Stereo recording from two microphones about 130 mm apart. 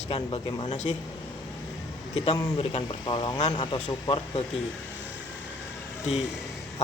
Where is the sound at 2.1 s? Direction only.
45° left (ahead or behind).